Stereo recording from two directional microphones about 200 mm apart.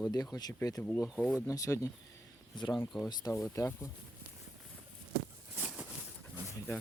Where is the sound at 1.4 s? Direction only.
15° left (ahead or behind).